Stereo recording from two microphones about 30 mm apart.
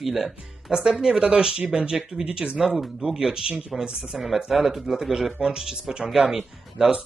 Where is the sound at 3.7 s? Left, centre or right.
Centre.